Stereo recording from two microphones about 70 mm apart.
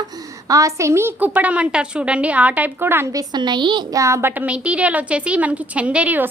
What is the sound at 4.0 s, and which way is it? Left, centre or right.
Speech, right.